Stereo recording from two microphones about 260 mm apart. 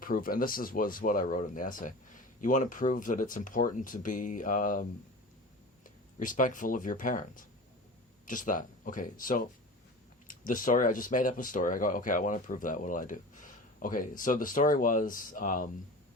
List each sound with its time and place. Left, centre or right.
0.0 s speech: left
6.1 s speech: left